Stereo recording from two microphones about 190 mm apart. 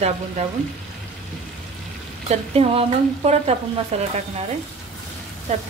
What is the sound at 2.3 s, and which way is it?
Speech, 30° right (ahead or behind).